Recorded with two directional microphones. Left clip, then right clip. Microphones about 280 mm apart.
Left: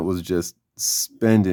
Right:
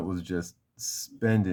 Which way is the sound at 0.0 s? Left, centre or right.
Left.